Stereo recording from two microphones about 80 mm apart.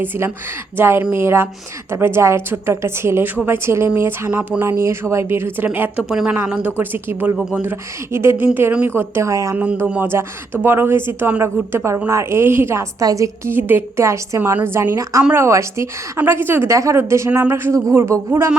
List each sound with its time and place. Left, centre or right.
0.8 s a woman's voice: right
4.3 s speech: centre
4.6 s a woman's voice: right
6.0 s speech: centre
6.3 s a woman's voice: right
13.5 s a woman's voice: right
16.1 s speech: right
16.6 s a woman's voice: right